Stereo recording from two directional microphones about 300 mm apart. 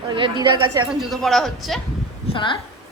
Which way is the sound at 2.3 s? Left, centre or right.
Centre.